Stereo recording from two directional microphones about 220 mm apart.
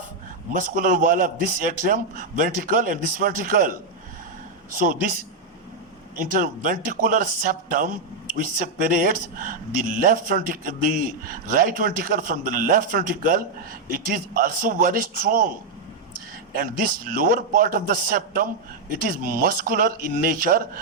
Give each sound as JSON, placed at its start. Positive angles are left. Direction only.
{"t": 0.5, "sound": "speech", "side_deg": -35}
{"t": 4.7, "sound": "speech", "side_deg": -40}
{"t": 6.1, "sound": "speech", "side_deg": -40}
{"t": 16.6, "sound": "speech", "side_deg": -40}